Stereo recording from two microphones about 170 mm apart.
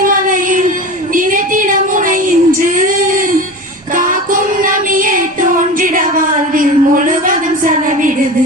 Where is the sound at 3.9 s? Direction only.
55° right (ahead or behind).